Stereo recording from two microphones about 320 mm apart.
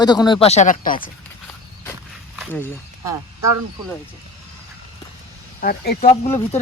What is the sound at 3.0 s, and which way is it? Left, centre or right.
Speech, centre.